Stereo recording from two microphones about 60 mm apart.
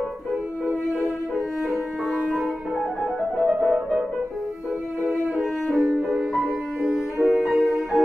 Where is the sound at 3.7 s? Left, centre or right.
Right.